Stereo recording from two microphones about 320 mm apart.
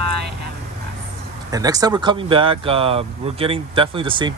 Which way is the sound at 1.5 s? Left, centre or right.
Centre.